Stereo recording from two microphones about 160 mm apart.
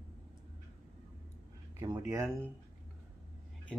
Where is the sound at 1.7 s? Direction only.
25° right (ahead or behind).